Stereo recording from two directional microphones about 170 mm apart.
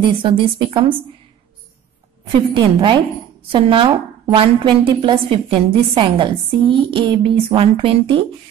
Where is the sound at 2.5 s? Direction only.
30° right (ahead or behind).